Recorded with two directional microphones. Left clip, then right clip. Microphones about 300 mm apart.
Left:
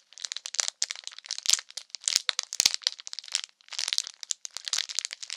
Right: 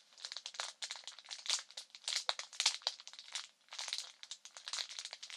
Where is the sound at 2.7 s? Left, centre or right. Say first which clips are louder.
Left 11 dB; left.